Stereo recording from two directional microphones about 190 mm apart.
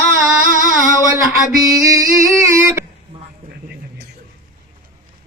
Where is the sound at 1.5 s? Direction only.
20° right (ahead or behind).